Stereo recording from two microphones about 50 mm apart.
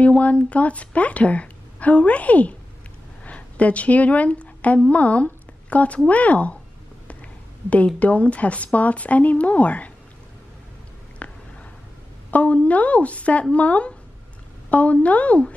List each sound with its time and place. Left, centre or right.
0.0 s a woman's voice: left
7.7 s a woman's voice: left
11.2 s a sound: left
12.3 s a woman's voice: left